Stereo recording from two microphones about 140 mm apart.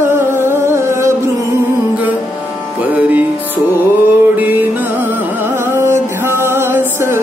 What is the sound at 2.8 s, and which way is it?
Music, 10° right (ahead or behind).